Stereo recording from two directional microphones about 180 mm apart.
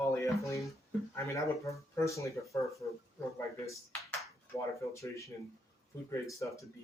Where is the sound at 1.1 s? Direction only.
15° left (ahead or behind).